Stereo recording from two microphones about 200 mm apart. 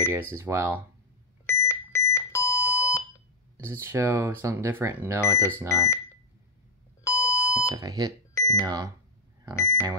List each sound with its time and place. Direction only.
0.1 s speech: 10° right (ahead or behind)
1.4 s alarm clock: 10° left (ahead or behind)
3.5 s speech: 15° right (ahead or behind)
5.7 s speech: 15° left (ahead or behind)
7.1 s alarm clock: 15° left (ahead or behind)
7.7 s speech: 20° right (ahead or behind)
8.4 s a sound: 15° left (ahead or behind)
8.6 s speech: 20° right (ahead or behind)
9.6 s speech: 15° left (ahead or behind)